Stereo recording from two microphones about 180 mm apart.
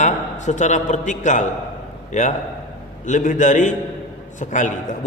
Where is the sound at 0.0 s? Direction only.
40° left (ahead or behind).